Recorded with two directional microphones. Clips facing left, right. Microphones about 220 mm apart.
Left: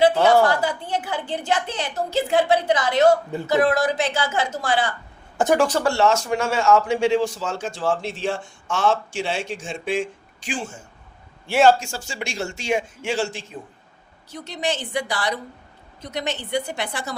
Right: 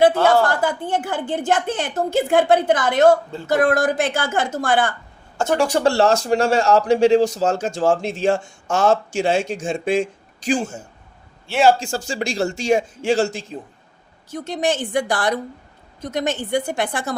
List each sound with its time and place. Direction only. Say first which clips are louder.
0.1 s a woman's voice: even; 15° left (ahead or behind)
0.4 s a woman's voice: right 1 dB; 50° right (ahead or behind)
5.4 s speech: left 2 dB; 20° left (ahead or behind)
5.8 s a man's voice: right 3 dB; 35° right (ahead or behind)
11.9 s a man's voice: right 7 dB; 35° right (ahead or behind)